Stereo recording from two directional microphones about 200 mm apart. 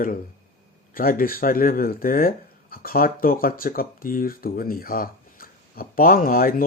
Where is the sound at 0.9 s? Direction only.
45° left (ahead or behind).